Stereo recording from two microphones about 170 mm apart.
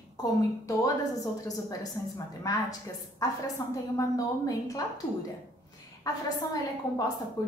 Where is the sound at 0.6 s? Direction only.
20° left (ahead or behind).